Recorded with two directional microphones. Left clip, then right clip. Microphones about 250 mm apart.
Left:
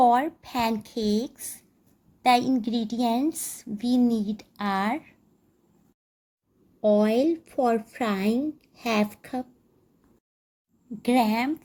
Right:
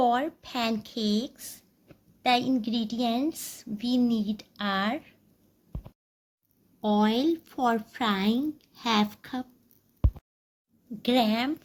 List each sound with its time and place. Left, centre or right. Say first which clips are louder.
0.0 s a woman's voice: left 5 dB; centre
6.8 s a woman's voice: left 4 dB; centre
11.0 s a woman's voice: left 2 dB; centre